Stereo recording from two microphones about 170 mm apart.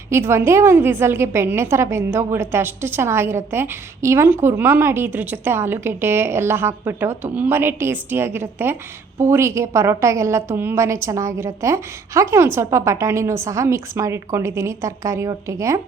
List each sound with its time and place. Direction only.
0.1 s a woman's voice: 15° right (ahead or behind)